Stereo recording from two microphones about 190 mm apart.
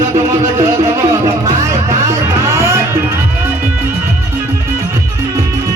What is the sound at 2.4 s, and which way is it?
Music, 15° right (ahead or behind).